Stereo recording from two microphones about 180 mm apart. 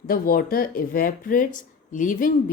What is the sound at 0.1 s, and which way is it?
A woman's voice, 55° left (ahead or behind).